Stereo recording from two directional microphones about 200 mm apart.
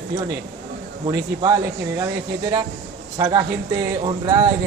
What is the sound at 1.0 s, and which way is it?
Speech, 15° right (ahead or behind).